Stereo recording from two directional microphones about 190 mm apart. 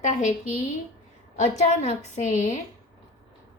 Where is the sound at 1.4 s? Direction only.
35° left (ahead or behind).